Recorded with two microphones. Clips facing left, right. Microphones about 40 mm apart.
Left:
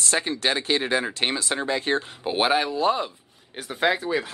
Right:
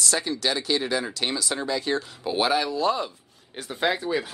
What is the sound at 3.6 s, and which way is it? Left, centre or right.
Speech, centre.